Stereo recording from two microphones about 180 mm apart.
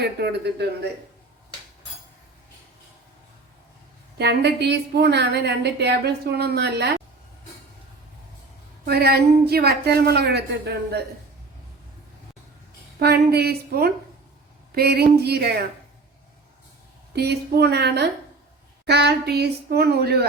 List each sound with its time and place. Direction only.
0.0 s a woman's voice: 65° right (ahead or behind)
4.2 s a woman's voice: 65° right (ahead or behind)
8.8 s a woman's voice: 60° right (ahead or behind)
13.0 s a woman's voice: 60° right (ahead or behind)
17.2 s a woman's voice: 65° right (ahead or behind)